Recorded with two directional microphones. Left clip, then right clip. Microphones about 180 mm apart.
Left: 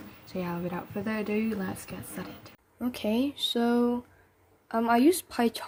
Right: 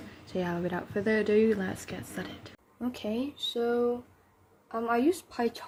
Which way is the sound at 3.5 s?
55° left (ahead or behind).